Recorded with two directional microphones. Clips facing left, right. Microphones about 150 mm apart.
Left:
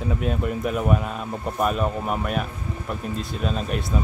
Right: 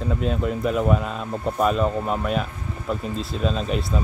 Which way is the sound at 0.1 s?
5° left (ahead or behind).